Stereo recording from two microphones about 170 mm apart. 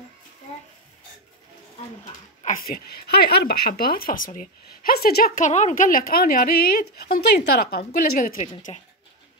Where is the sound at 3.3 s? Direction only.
65° left (ahead or behind).